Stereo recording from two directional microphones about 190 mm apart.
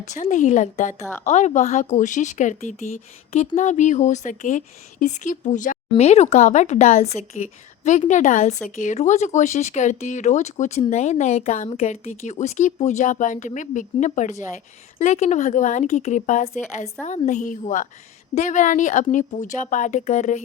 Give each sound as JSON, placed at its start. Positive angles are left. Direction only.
{"t": 0.0, "sound": "speech", "side_deg": 40}